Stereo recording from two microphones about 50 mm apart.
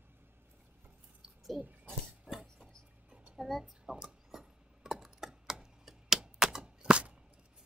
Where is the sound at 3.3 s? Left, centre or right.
Centre.